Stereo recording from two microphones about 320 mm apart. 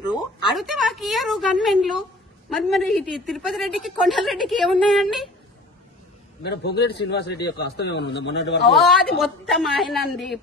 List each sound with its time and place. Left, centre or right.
0.0 s speech: centre
0.6 s a woman's voice: centre
6.4 s a man's voice: left
8.6 s a woman's voice: centre